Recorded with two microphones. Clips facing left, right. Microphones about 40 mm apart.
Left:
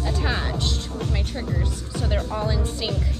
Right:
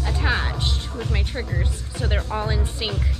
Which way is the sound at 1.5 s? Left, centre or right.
Right.